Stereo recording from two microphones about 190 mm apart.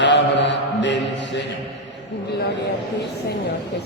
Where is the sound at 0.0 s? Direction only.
70° left (ahead or behind).